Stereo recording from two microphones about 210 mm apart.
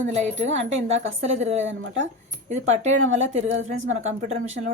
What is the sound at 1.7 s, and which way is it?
Speech, 60° right (ahead or behind).